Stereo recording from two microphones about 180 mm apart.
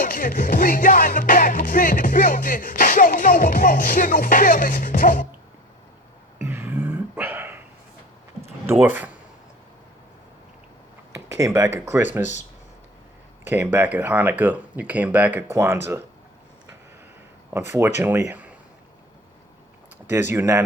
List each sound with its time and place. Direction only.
0.0 s music: 50° left (ahead or behind)
6.4 s a sound: 10° right (ahead or behind)
8.8 s speech: 10° right (ahead or behind)
11.3 s speech: 20° right (ahead or behind)
13.4 s speech: 10° right (ahead or behind)
17.5 s speech: 15° right (ahead or behind)
20.1 s speech: 10° right (ahead or behind)